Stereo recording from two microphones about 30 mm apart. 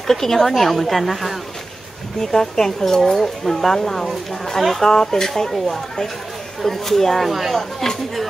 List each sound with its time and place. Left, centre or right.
0.0 s speech: centre
2.1 s speech: centre
4.9 s speech: centre
6.6 s speech: centre